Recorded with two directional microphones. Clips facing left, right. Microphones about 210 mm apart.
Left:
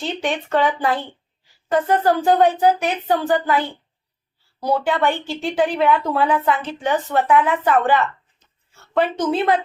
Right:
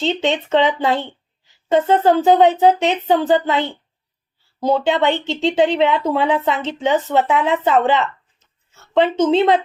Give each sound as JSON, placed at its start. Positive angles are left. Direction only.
{"t": 0.0, "sound": "speech", "side_deg": -25}